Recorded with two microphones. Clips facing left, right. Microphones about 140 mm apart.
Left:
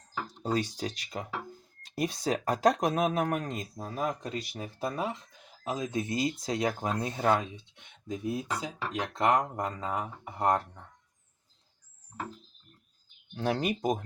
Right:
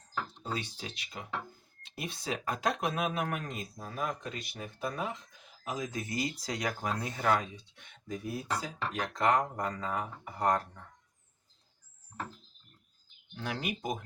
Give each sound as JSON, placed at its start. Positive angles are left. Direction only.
{"t": 0.4, "sound": "speech", "side_deg": 40}
{"t": 13.3, "sound": "speech", "side_deg": 35}